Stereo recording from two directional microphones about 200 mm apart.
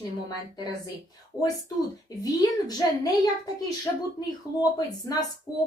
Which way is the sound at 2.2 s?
20° left (ahead or behind).